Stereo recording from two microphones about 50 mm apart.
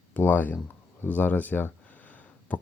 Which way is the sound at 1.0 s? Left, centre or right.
Left.